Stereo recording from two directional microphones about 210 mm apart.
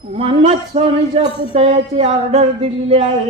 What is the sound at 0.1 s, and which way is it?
A woman's voice, 30° right (ahead or behind).